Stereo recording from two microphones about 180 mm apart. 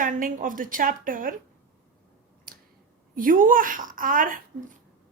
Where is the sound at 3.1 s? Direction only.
50° right (ahead or behind).